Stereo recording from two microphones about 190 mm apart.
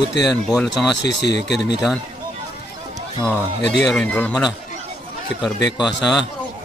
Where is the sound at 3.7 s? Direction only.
Centre (ahead or behind).